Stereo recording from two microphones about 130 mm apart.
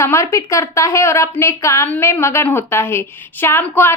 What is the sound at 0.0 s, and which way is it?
A woman's voice, 20° left (ahead or behind).